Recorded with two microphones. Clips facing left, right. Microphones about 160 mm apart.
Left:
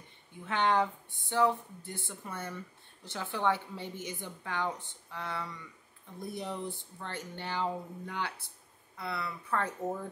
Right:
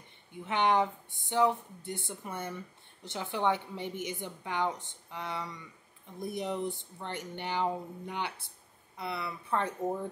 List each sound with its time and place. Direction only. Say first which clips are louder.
0.3 s speech: right 1 dB; 15° right (ahead or behind)